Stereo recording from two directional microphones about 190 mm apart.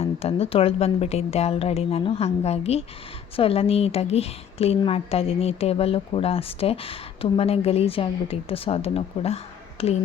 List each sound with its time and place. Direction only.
0.0 s speech: 35° left (ahead or behind)